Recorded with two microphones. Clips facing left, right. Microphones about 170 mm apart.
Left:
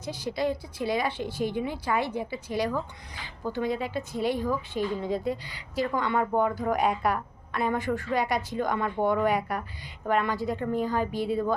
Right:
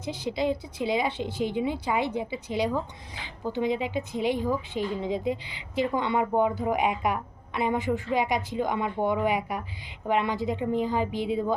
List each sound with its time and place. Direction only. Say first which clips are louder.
0.0 s speech: right 1 dB; 20° right (ahead or behind)